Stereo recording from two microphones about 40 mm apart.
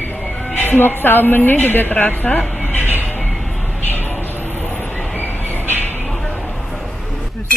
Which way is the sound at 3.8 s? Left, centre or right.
Left.